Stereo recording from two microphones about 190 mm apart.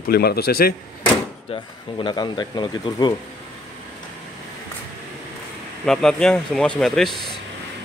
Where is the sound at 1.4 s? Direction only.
25° left (ahead or behind).